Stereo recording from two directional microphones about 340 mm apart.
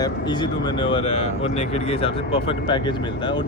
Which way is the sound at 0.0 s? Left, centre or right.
Centre.